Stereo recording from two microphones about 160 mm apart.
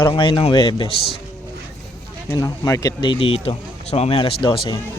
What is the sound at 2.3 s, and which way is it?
Speech, 25° left (ahead or behind).